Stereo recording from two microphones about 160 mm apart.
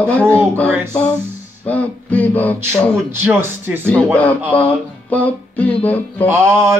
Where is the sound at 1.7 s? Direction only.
10° left (ahead or behind).